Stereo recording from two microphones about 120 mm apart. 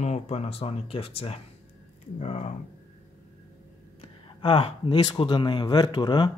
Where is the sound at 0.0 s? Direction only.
65° left (ahead or behind).